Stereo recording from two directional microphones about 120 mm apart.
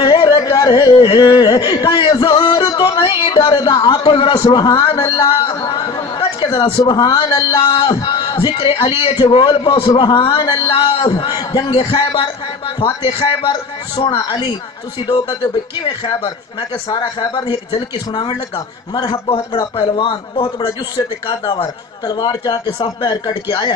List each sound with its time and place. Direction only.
0.0 s a sound: 40° left (ahead or behind)
2.8 s music: 40° left (ahead or behind)
3.3 s a man's voice: 35° left (ahead or behind)
16.9 s a man's voice: 40° left (ahead or behind)